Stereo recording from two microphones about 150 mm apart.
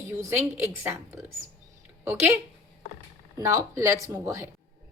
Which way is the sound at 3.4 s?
20° right (ahead or behind).